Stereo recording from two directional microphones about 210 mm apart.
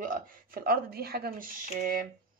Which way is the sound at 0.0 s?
45° right (ahead or behind).